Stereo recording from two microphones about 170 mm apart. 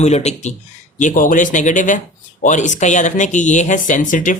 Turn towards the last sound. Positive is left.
turn(degrees=50)  # may be behind; listen again after turning